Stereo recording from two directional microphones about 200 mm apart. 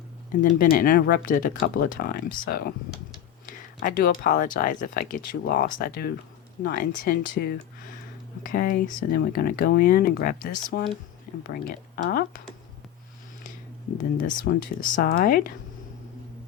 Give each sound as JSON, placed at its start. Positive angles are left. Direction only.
{"t": 0.6, "sound": "speech", "side_deg": 45}
{"t": 14.2, "sound": "speech", "side_deg": 45}